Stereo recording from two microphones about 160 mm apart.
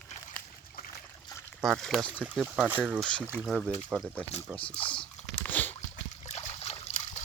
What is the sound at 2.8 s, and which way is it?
Speech, centre (ahead or behind).